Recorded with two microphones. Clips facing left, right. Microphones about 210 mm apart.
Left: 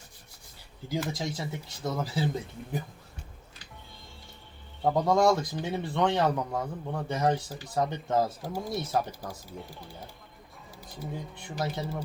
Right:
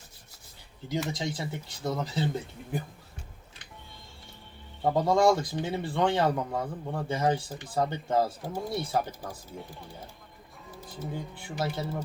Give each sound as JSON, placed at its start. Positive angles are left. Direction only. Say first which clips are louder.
{"t": 0.9, "sound": "speech", "louder": "right 1 dB", "side_deg": 0}
{"t": 4.8, "sound": "speech", "louder": "even", "side_deg": 0}
{"t": 8.4, "sound": "speech", "louder": "right 1 dB", "side_deg": 10}
{"t": 8.9, "sound": "speech", "louder": "left 1 dB", "side_deg": 0}
{"t": 11.1, "sound": "speech", "louder": "even", "side_deg": -5}